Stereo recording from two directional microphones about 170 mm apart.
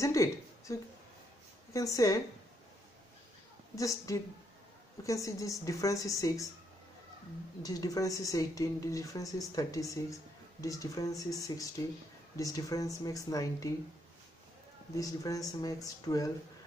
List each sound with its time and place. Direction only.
0.0 s a woman's voice: 20° left (ahead or behind)
3.7 s a woman's voice: 20° left (ahead or behind)
7.6 s a woman's voice: 20° left (ahead or behind)
15.0 s a woman's voice: 20° left (ahead or behind)